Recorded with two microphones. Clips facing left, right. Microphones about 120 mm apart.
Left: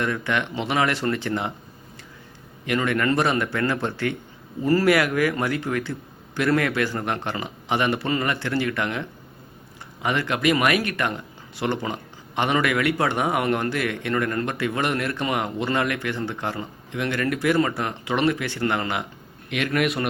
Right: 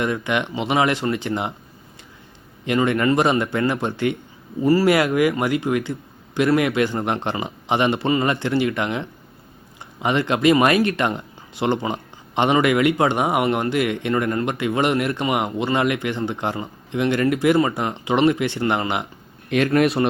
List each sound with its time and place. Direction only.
0.0 s speech: 20° right (ahead or behind)
2.6 s speech: 20° right (ahead or behind)
4.9 s speech: 25° right (ahead or behind)
19.5 s speech: 40° right (ahead or behind)